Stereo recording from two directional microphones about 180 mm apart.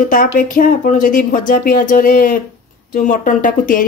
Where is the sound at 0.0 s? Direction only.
50° left (ahead or behind).